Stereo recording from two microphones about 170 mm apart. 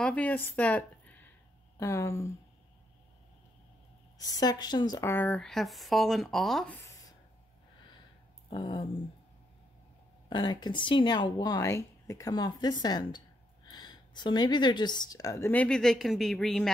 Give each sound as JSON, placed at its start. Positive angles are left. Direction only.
{"t": 0.0, "sound": "speech", "side_deg": 10}
{"t": 4.2, "sound": "a woman's voice", "side_deg": 20}
{"t": 5.1, "sound": "speech", "side_deg": 10}
{"t": 8.5, "sound": "a woman's voice", "side_deg": 25}
{"t": 10.3, "sound": "a woman's voice", "side_deg": 25}